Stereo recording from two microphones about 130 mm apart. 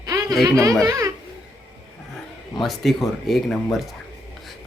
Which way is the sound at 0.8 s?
25° right (ahead or behind).